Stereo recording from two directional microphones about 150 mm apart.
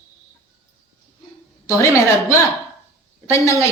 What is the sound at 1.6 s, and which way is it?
Speech, 20° left (ahead or behind).